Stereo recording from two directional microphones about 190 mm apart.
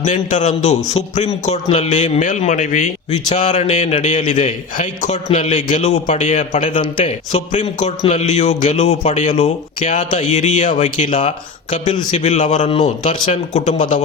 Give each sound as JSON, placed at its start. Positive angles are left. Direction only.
{"t": 0.0, "sound": "a man's voice", "side_deg": 40}